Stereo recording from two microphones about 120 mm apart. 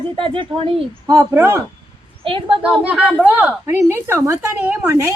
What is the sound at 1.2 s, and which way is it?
Speech, 20° right (ahead or behind).